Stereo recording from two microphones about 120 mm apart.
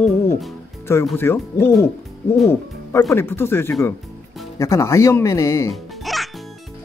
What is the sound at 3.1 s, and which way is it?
Speech, 20° left (ahead or behind).